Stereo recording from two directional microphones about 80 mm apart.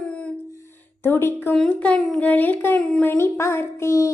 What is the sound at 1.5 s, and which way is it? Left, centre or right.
Speech, centre.